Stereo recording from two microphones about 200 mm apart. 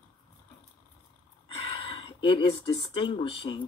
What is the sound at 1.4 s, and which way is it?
Speech, 25° left (ahead or behind).